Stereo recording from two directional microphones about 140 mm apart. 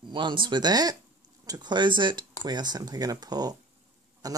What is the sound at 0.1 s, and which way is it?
Speech, 35° right (ahead or behind).